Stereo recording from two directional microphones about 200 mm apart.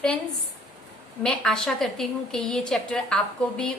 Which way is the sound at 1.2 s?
5° left (ahead or behind).